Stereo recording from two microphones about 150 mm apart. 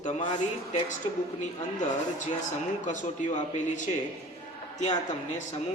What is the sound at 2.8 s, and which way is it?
A man's voice, 55° left (ahead or behind).